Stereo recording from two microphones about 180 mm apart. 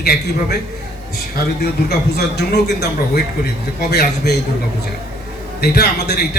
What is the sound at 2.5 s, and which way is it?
A man's voice, 65° left (ahead or behind).